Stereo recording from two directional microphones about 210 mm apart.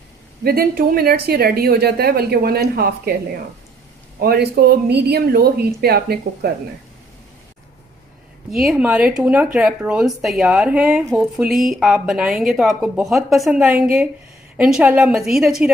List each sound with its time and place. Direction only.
0.4 s speech: 45° right (ahead or behind)
4.2 s speech: 50° right (ahead or behind)
8.7 s speech: 5° right (ahead or behind)